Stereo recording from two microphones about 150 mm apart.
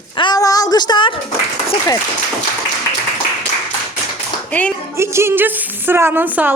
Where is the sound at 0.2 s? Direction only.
25° left (ahead or behind).